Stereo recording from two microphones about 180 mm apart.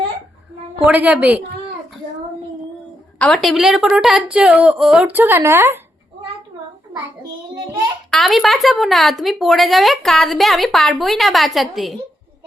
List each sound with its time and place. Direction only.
0.9 s a woman's voice: 10° right (ahead or behind)
3.2 s speech: centre (ahead or behind); by 5.8 s 15° right (ahead or behind)
8.1 s speech: centre (ahead or behind)